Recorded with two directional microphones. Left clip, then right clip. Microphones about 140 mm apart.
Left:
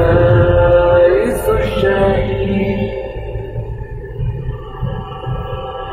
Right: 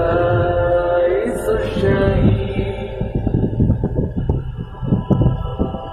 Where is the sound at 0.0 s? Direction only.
25° left (ahead or behind).